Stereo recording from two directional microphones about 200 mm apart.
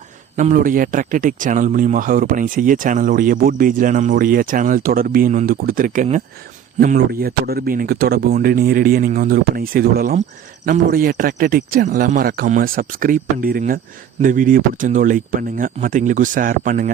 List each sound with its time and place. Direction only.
0.3 s speech: 40° right (ahead or behind)